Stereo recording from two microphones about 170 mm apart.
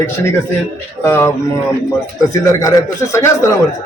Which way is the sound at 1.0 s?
15° left (ahead or behind).